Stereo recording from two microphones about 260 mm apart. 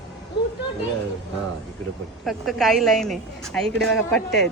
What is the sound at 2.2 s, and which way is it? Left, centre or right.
Speech, centre.